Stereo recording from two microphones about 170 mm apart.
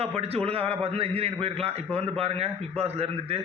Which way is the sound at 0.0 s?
35° right (ahead or behind).